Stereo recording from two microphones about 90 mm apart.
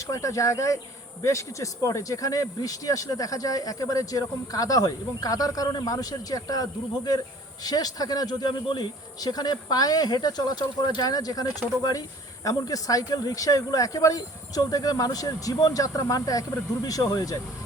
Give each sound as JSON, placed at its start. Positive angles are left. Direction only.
{"t": 0.0, "sound": "speech", "side_deg": 35}